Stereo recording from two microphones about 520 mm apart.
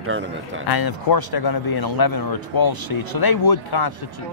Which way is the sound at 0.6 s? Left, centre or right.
Left.